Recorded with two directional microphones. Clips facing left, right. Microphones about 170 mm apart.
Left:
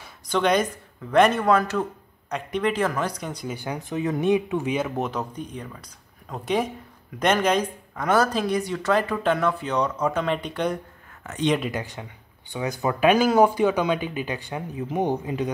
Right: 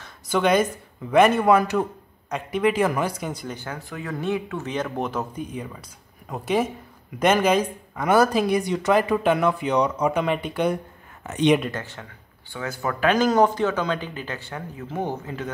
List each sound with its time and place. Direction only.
0.3 s speech: 5° right (ahead or behind)
3.4 s speech: 15° left (ahead or behind); by 10.8 s 5° right (ahead or behind)
11.2 s speech: 20° right (ahead or behind)
11.7 s speech: 15° left (ahead or behind)